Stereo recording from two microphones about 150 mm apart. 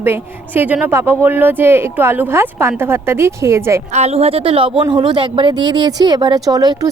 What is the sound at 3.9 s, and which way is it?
A woman's voice, 45° right (ahead or behind).